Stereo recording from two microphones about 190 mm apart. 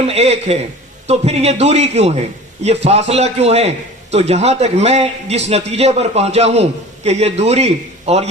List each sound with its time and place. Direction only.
0.1 s a man's voice: 35° right (ahead or behind)